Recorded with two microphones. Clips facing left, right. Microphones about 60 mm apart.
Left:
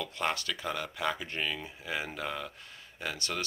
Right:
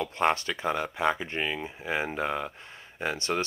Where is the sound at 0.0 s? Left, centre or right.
Right.